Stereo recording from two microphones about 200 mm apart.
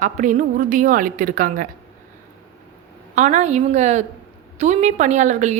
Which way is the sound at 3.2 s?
35° right (ahead or behind).